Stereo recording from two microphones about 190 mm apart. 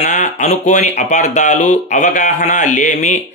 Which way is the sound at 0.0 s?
40° left (ahead or behind).